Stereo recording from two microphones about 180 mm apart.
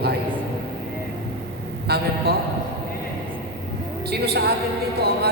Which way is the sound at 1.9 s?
60° right (ahead or behind).